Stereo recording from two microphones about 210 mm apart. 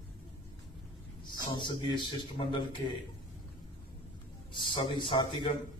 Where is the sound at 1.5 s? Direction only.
20° left (ahead or behind).